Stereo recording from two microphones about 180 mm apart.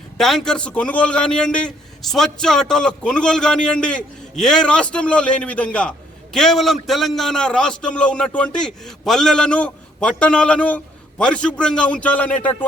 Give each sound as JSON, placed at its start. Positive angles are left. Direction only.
{"t": 0.2, "sound": "a man's voice", "side_deg": 0}